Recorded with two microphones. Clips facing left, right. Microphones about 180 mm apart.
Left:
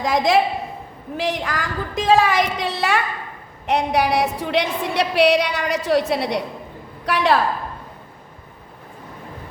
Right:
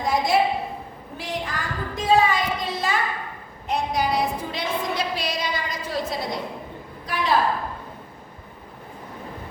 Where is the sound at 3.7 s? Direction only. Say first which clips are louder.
Left 5 dB; 70° left (ahead or behind).